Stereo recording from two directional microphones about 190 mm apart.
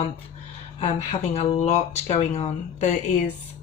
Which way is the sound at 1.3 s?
30° left (ahead or behind).